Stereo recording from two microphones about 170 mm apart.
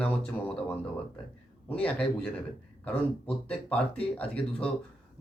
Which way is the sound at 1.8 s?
10° left (ahead or behind).